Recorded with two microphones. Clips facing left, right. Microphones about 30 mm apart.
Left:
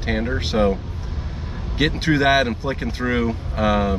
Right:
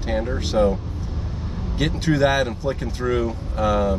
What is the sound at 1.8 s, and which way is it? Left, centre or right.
Speech, left.